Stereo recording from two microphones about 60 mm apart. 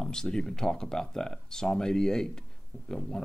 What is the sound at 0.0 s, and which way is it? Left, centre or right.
Speech, centre.